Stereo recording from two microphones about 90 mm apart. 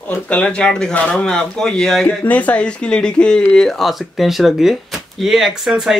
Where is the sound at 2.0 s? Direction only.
15° left (ahead or behind).